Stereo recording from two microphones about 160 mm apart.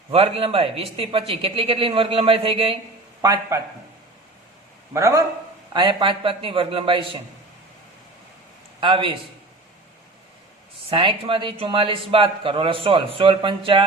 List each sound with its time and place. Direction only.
0.1 s speech: 35° right (ahead or behind)
3.2 s a man's voice: 20° right (ahead or behind)
4.9 s a man's voice: 20° right (ahead or behind)
5.7 s speech: 30° right (ahead or behind)
8.8 s speech: 30° right (ahead or behind)
10.8 s speech: 35° right (ahead or behind)